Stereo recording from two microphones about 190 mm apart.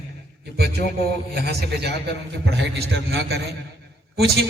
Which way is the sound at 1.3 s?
60° right (ahead or behind).